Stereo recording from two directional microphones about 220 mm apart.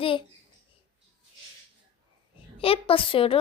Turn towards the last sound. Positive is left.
turn(degrees=25)  # may be behind; listen again after turning